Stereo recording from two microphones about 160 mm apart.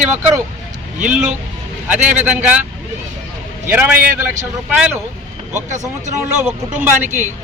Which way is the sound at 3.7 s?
15° right (ahead or behind).